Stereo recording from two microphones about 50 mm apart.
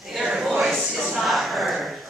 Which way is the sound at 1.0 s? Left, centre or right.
Centre.